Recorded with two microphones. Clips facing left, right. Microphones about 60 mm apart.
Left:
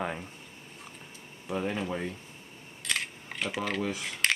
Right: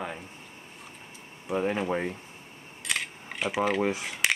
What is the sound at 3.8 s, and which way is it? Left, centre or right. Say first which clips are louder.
Speech: right 5 dB; right.